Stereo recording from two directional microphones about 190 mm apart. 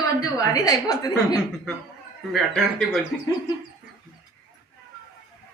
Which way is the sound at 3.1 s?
Centre (ahead or behind).